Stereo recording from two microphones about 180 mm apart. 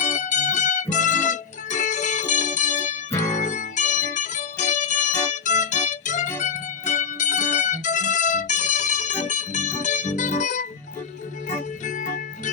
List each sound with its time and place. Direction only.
0.0 s music: 45° left (ahead or behind)
11.9 s music: 50° left (ahead or behind)